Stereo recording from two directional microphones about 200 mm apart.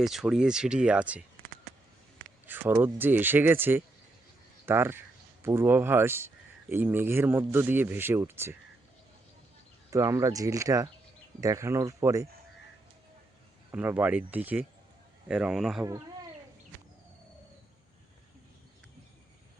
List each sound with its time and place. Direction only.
0.0 s speech: centre (ahead or behind)
2.5 s speech: 10° right (ahead or behind)
9.9 s speech: 15° right (ahead or behind)
13.7 s speech: 10° right (ahead or behind)